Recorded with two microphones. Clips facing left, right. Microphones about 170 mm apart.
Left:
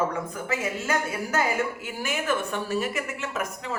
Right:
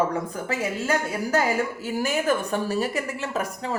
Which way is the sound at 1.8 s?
35° right (ahead or behind).